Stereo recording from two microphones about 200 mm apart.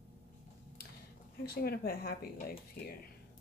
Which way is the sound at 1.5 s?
50° left (ahead or behind).